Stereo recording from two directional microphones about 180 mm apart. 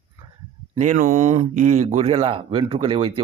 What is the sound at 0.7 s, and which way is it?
Speech, 45° right (ahead or behind).